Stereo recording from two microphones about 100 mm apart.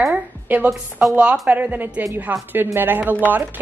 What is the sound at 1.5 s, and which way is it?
A woman's voice, 15° right (ahead or behind).